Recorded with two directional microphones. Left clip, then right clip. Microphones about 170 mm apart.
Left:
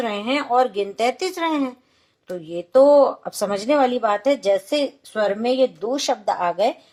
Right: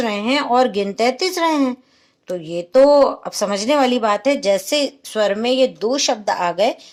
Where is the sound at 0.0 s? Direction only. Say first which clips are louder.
Right 4 dB; 30° right (ahead or behind).